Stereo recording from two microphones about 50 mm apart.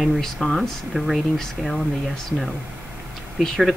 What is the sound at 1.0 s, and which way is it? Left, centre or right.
Speech, right.